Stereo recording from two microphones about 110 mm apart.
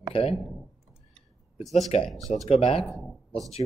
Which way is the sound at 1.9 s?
75° left (ahead or behind).